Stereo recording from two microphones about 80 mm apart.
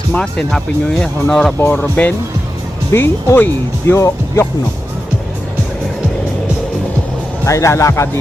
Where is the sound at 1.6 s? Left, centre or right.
Left.